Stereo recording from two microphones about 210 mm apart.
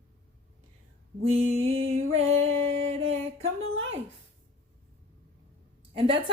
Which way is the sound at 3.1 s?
70° right (ahead or behind).